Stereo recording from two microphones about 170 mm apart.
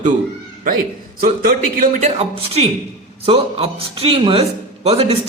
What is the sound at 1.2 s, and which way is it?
A man's voice, 55° right (ahead or behind).